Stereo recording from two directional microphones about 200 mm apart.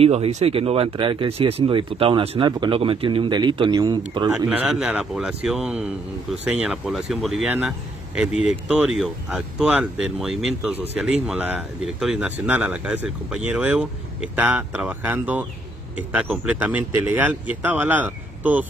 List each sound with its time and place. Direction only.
0.0 s speech: 30° right (ahead or behind)
4.5 s speech: 5° right (ahead or behind)